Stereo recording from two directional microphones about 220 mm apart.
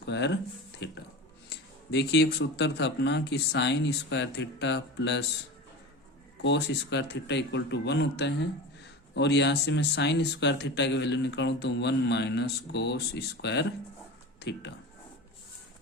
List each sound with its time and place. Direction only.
0.0 s speech: 55° left (ahead or behind)
0.8 s a sound: 50° left (ahead or behind)
1.5 s speech: 50° left (ahead or behind)
6.4 s speech: 55° left (ahead or behind)